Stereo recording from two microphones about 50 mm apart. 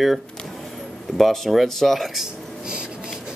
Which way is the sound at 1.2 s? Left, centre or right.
Centre.